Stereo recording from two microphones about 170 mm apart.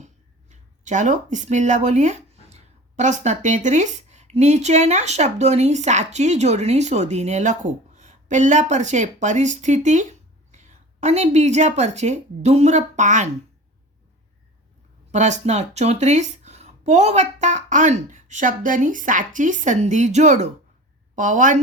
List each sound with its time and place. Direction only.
0.0 s a woman's voice: 45° right (ahead or behind)
15.1 s speech: 45° right (ahead or behind)